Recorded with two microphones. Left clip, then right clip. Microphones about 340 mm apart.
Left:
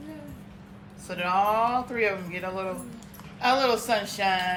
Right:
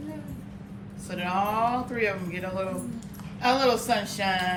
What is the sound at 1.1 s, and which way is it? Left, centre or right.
Speech, centre.